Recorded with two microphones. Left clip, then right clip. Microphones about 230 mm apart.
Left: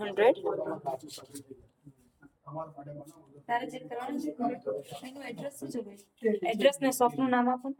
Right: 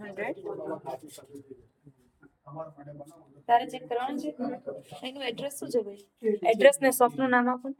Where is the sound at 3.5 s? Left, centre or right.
Right.